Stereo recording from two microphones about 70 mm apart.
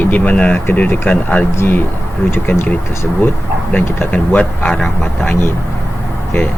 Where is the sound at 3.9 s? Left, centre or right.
Left.